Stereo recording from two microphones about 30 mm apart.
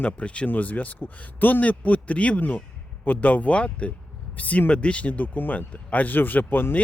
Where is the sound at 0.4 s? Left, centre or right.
Left.